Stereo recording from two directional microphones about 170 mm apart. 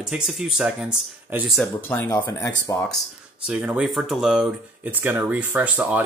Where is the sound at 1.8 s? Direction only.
15° left (ahead or behind).